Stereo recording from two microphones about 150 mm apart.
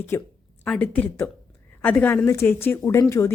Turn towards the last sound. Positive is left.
turn(degrees=20)  # may be behind; listen again after turning